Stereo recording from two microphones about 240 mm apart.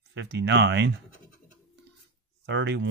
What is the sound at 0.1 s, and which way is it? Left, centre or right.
Speech, right.